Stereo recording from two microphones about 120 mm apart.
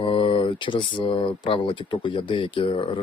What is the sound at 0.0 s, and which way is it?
Speech, 45° left (ahead or behind).